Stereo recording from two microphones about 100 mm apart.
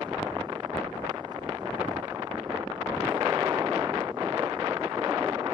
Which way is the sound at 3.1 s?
45° right (ahead or behind).